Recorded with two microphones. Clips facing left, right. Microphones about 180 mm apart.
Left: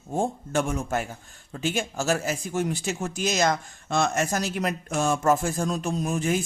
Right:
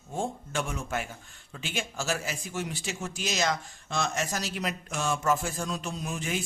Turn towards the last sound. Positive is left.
turn(degrees=45)  # may be behind; listen again after turning